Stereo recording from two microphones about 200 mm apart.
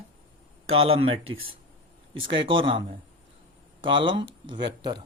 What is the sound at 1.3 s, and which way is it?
Speech, 90° right.